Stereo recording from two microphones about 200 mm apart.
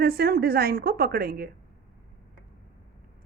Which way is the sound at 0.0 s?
50° right (ahead or behind).